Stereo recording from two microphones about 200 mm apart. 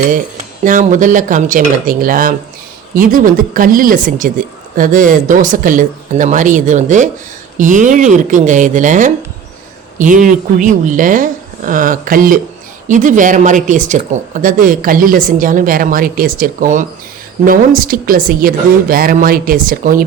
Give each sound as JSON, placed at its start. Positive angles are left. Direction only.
{"t": 0.6, "sound": "speech", "side_deg": -40}